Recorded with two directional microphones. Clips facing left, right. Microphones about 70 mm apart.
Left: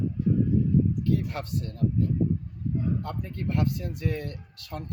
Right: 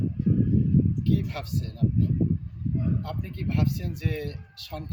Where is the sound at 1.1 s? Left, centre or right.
Left.